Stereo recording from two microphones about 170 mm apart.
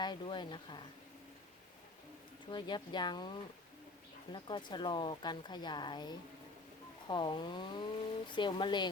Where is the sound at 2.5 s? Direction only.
25° left (ahead or behind).